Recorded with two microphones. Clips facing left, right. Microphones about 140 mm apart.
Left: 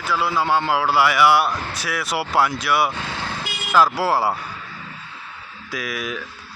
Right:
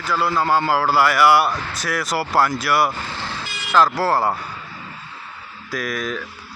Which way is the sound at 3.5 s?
55° left (ahead or behind).